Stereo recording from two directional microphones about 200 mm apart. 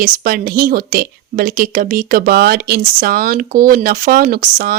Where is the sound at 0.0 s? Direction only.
45° right (ahead or behind).